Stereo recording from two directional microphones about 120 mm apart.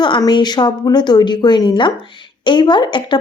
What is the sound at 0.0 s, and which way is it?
A woman's voice, 40° left (ahead or behind).